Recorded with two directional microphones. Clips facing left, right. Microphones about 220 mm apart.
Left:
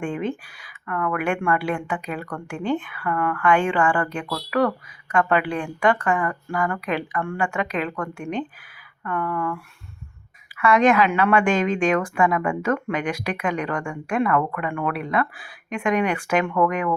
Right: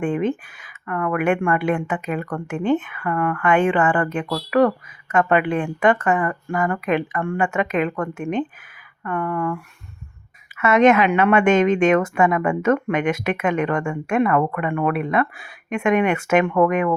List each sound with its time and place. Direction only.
0.3 s a woman's voice: 20° right (ahead or behind)
10.6 s a woman's voice: 25° right (ahead or behind)